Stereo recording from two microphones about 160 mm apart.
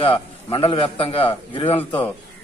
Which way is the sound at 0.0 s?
35° left (ahead or behind).